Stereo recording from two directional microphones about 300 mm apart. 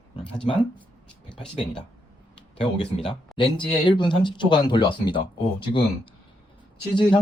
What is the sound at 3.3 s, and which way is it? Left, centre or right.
Speech, centre.